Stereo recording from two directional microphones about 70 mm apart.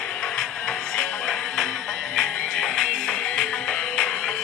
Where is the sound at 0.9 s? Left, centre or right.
Centre.